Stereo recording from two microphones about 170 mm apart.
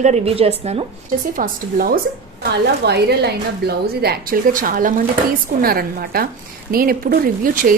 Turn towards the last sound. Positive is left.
turn(degrees=-55)  # may be behind; listen again after turning